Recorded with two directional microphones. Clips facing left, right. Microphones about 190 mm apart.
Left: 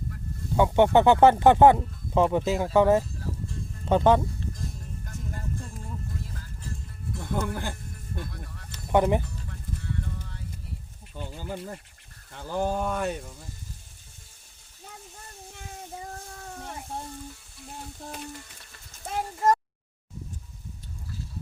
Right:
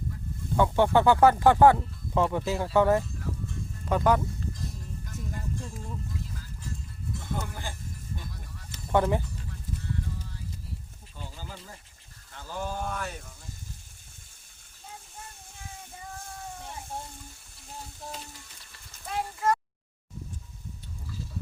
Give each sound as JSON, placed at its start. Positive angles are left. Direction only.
{"t": 0.5, "sound": "speech", "side_deg": 20}
{"t": 7.2, "sound": "music", "side_deg": 55}
{"t": 8.9, "sound": "speech", "side_deg": 20}
{"t": 11.1, "sound": "speech", "side_deg": 60}
{"t": 19.0, "sound": "speech", "side_deg": 40}